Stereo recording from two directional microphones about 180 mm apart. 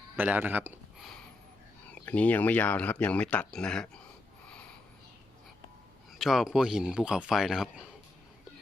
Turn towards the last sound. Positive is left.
turn(degrees=0)  # may be behind; listen again after turning